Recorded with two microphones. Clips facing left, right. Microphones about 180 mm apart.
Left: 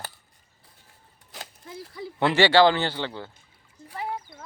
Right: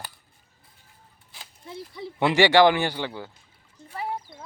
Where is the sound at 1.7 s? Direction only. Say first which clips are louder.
Right 1 dB; centre (ahead or behind).